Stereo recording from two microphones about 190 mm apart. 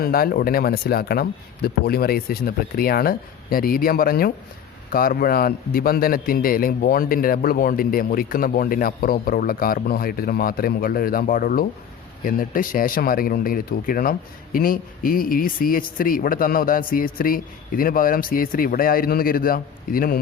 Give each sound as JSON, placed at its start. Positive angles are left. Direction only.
{"t": 0.0, "sound": "speech", "side_deg": 50}